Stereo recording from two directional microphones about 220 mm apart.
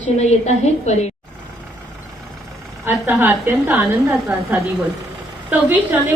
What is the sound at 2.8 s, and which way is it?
A woman's voice, 10° right (ahead or behind).